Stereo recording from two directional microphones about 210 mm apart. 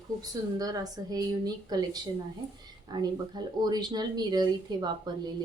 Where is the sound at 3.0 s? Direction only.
20° right (ahead or behind).